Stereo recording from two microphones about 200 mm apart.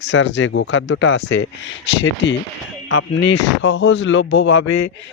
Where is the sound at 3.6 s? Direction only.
70° left (ahead or behind).